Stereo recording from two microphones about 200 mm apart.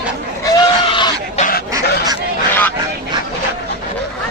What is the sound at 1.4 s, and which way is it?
Fowl, 45° left (ahead or behind).